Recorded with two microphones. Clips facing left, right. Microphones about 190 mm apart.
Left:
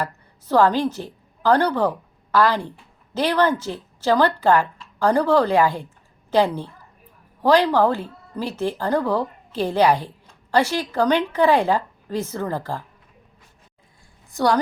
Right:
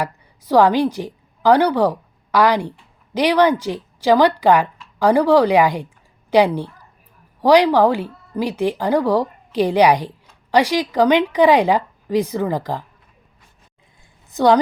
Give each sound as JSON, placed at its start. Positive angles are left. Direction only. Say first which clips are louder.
{"t": 0.0, "sound": "a woman's voice", "louder": "right 3 dB", "side_deg": -15}
{"t": 14.3, "sound": "a woman's voice", "louder": "right 5 dB", "side_deg": -20}